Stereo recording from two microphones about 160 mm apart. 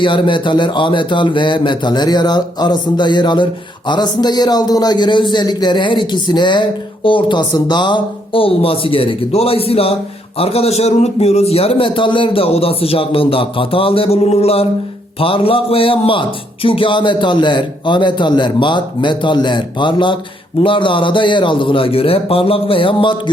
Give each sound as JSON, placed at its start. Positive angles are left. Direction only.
{"t": 0.0, "sound": "a man's voice", "side_deg": 30}